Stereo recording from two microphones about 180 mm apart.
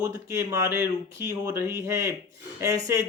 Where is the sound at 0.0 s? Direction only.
15° right (ahead or behind).